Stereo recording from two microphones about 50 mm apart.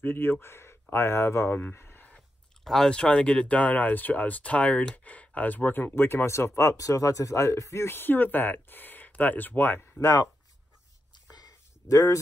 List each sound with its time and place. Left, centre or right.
0.0 s speech: left
1.5 s speech: left
1.8 s a sound: left
2.6 s speech: centre
2.9 s speech: left
9.9 s speech: left